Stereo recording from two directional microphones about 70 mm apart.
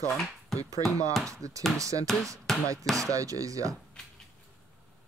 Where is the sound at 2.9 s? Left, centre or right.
Right.